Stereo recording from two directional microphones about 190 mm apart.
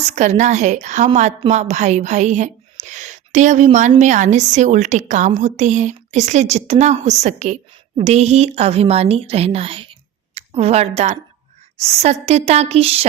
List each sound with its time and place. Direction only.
0.0 s a woman's voice: 40° right (ahead or behind)